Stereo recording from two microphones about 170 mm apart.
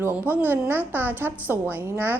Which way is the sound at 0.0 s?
10° right (ahead or behind).